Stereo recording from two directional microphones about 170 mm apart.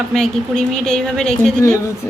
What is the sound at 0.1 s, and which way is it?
Speech, 5° left (ahead or behind).